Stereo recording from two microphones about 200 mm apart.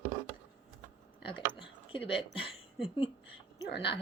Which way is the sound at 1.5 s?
25° left (ahead or behind).